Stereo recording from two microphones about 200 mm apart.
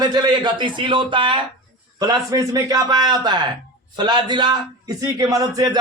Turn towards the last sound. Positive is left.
turn(degrees=-20)  # may be behind; listen again after turning